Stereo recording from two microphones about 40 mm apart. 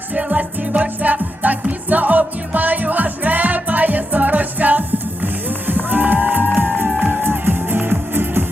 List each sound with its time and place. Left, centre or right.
0.1 s music: right